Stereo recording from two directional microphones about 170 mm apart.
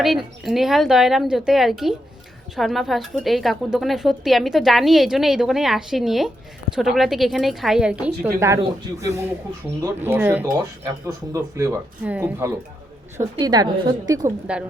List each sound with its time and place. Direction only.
0.0 s a woman's voice: centre (ahead or behind)
8.4 s speech: 20° right (ahead or behind)
13.3 s a woman's voice: 25° right (ahead or behind)